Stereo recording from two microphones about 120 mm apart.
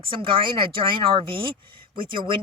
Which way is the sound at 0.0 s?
45° right (ahead or behind).